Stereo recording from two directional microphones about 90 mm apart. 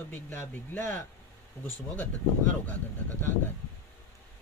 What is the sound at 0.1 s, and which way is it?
Speech, 25° left (ahead or behind).